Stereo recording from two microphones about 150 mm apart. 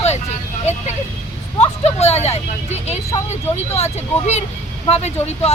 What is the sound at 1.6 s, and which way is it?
Speech, 45° left (ahead or behind).